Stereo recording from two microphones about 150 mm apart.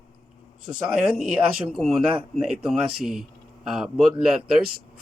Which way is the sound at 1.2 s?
Centre (ahead or behind).